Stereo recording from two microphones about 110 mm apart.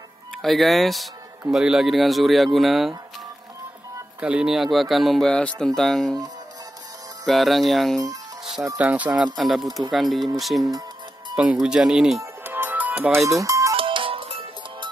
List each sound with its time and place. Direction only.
0.4 s speech: centre (ahead or behind)
4.2 s speech: 10° right (ahead or behind)
7.2 s speech: centre (ahead or behind)
8.7 s speech: 15° right (ahead or behind)
9.4 s speech: centre (ahead or behind)
11.6 s speech: 5° right (ahead or behind)
12.2 s music: 20° right (ahead or behind)
13.2 s speech: 30° right (ahead or behind)
13.7 s music: 50° right (ahead or behind)